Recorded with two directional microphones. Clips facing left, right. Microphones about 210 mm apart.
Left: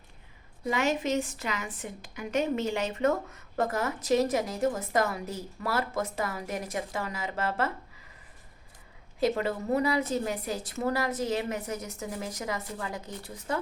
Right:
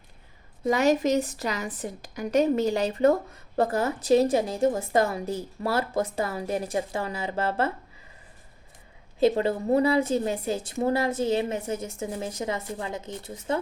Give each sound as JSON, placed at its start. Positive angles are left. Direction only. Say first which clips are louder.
{"t": 0.7, "sound": "a woman's voice", "louder": "right 6 dB", "side_deg": -40}
{"t": 9.2, "sound": "a woman's voice", "louder": "right 5 dB", "side_deg": -30}